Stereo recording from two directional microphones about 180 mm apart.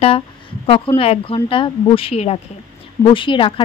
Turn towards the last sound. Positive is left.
turn(degrees=30)  # may be behind; listen again after turning